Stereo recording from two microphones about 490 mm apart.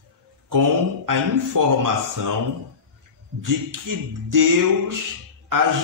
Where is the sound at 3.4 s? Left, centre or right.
Right.